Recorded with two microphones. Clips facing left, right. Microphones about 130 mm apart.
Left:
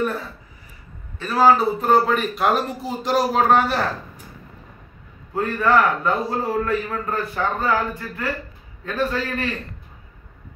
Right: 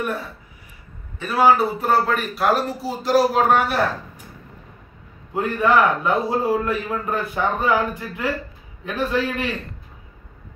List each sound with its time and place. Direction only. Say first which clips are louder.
1.2 s a man's voice: even; 5° right (ahead or behind)
5.3 s a man's voice: even; 15° right (ahead or behind)